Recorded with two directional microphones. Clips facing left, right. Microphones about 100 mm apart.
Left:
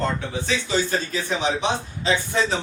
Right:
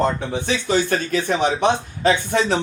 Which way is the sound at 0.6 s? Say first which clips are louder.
Right 7 dB; 60° right (ahead or behind).